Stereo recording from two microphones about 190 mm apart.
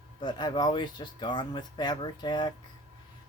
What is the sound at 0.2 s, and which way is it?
Speech, 25° left (ahead or behind).